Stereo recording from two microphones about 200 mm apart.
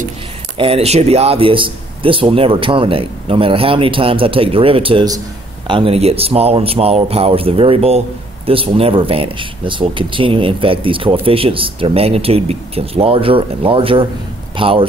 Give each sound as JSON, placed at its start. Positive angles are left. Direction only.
{"t": 0.6, "sound": "speech", "side_deg": -30}